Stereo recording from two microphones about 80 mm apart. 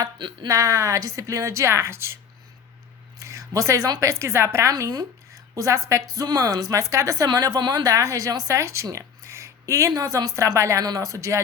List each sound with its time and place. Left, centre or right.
0.4 s speech: right
3.2 s a sound: right
4.0 s speech: right
4.9 s a woman's voice: right